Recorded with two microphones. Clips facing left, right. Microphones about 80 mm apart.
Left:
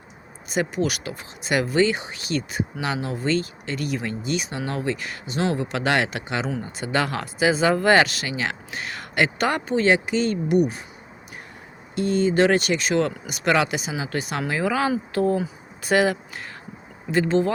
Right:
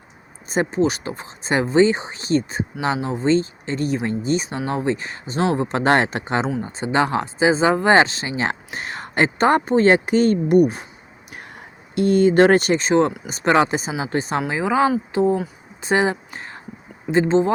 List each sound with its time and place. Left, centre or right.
0.4 s speech: right
11.9 s speech: right